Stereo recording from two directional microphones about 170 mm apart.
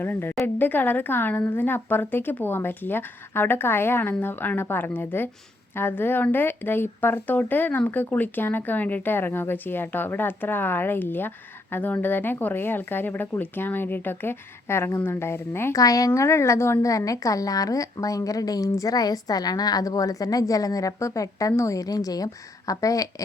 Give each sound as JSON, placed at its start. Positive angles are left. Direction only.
{"t": 0.0, "sound": "speech", "side_deg": 10}